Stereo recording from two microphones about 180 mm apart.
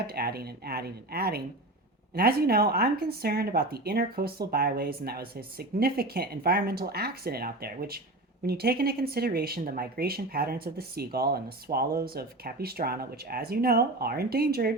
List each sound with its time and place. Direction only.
0.1 s speech: 60° right (ahead or behind)